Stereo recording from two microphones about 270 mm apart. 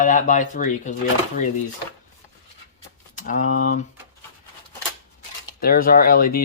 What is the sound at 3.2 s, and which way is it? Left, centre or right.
Speech, left.